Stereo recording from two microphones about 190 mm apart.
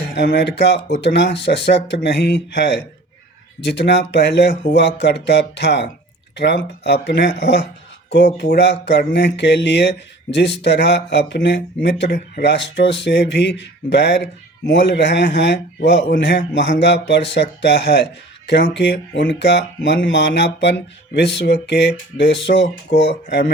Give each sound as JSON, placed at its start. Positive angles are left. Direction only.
{"t": 0.0, "sound": "speech", "side_deg": 60}